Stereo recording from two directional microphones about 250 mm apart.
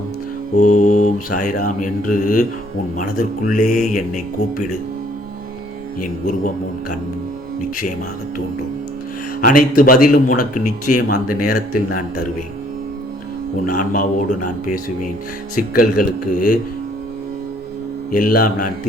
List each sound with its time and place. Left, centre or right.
0.5 s mantra: left
6.0 s mantra: left
9.4 s mantra: left
13.7 s mantra: left
18.1 s mantra: left